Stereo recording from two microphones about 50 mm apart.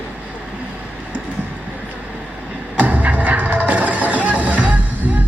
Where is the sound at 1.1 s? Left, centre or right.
Right.